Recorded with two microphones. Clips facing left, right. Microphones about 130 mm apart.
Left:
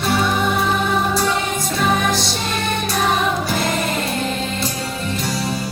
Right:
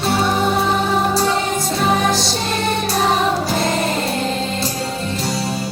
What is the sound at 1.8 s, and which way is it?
Music, 30° right (ahead or behind).